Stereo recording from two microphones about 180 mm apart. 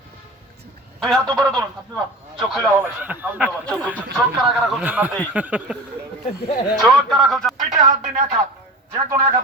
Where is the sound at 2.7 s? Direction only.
10° right (ahead or behind).